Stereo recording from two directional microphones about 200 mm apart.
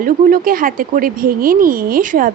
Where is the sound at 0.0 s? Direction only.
45° right (ahead or behind).